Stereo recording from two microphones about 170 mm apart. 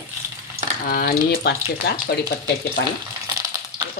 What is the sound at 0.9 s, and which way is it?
Speech, 60° left (ahead or behind).